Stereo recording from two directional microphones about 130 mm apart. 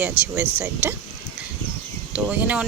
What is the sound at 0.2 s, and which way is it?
Speech, 20° right (ahead or behind).